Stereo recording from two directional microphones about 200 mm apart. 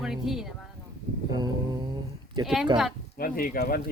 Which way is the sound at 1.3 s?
20° right (ahead or behind).